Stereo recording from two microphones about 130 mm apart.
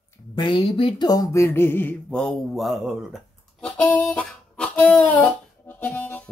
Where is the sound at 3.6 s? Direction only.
10° left (ahead or behind).